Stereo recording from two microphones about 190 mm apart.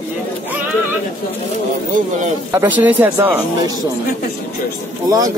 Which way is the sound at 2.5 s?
10° right (ahead or behind).